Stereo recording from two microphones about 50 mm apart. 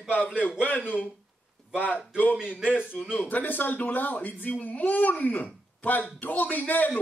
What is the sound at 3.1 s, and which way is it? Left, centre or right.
Speech, left.